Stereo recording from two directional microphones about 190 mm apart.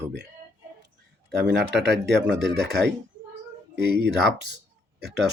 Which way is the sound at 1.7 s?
60° right (ahead or behind).